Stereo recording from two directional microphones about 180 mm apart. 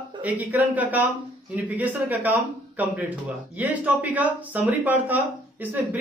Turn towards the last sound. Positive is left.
turn(degrees=-10)  # may be behind; listen again after turning